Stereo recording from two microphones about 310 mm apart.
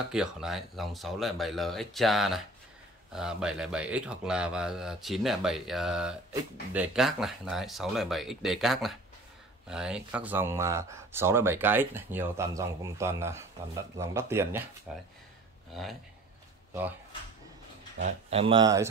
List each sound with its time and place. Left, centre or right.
0.1 s speech: centre
15.7 s speech: centre
17.9 s speech: right